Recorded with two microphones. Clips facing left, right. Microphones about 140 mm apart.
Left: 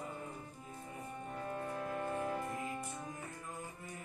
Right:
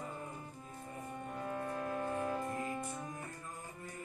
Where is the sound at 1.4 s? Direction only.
15° right (ahead or behind).